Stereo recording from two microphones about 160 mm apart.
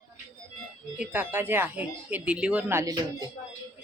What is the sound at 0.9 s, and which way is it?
Speech, 10° right (ahead or behind).